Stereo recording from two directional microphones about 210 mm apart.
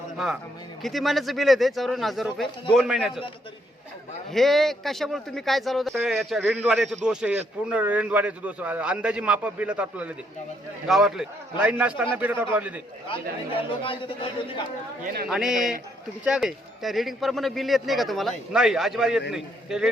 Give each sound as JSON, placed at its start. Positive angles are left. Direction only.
{"t": 0.8, "sound": "speech", "side_deg": 0}
{"t": 4.3, "sound": "a man's voice", "side_deg": 0}
{"t": 13.5, "sound": "speech", "side_deg": 25}
{"t": 15.0, "sound": "a man's voice", "side_deg": -45}
{"t": 15.3, "sound": "speech", "side_deg": 0}